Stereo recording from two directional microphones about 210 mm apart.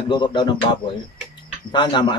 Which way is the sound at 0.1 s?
20° left (ahead or behind).